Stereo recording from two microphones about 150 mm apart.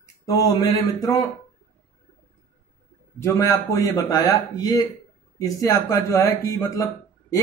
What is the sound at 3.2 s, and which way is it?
Speech, 20° left (ahead or behind).